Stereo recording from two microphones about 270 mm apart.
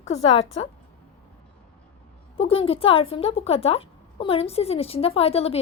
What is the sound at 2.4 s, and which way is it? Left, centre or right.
A woman's voice, left.